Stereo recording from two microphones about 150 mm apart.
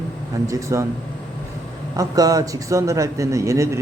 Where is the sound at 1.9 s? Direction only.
25° right (ahead or behind).